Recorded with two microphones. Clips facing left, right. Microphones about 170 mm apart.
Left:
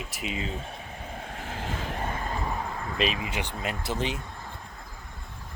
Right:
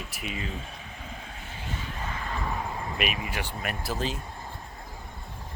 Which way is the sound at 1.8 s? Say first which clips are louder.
Left 4 dB; 55° left (ahead or behind).